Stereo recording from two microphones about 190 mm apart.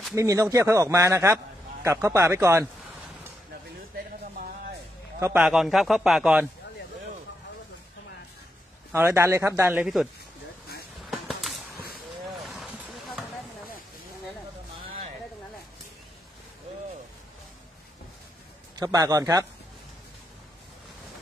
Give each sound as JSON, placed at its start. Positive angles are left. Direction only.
{"t": 0.1, "sound": "a man's voice", "side_deg": -15}
{"t": 5.2, "sound": "a man's voice", "side_deg": -5}
{"t": 8.9, "sound": "a man's voice", "side_deg": -15}
{"t": 11.1, "sound": "a sound", "side_deg": 0}
{"t": 12.4, "sound": "vehicle", "side_deg": 0}
{"t": 18.8, "sound": "a man's voice", "side_deg": -20}